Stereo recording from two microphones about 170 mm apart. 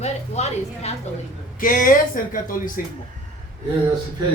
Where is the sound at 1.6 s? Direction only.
55° left (ahead or behind).